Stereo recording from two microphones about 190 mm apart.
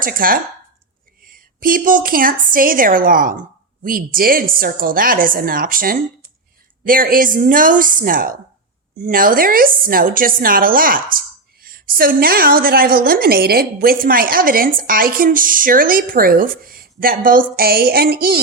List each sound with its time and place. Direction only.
0.0 s a woman's voice: 50° right (ahead or behind)